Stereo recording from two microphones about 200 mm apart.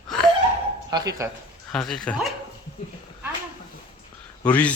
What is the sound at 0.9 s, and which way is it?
Speech, 15° right (ahead or behind).